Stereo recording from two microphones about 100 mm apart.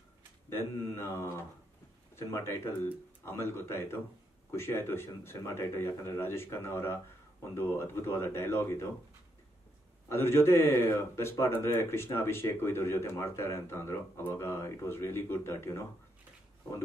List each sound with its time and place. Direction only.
0.5 s speech: 25° left (ahead or behind)
10.0 s speech: 25° left (ahead or behind)